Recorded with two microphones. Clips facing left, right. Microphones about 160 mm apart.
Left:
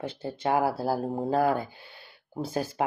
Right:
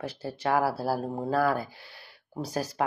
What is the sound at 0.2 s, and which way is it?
Speech, 25° left (ahead or behind).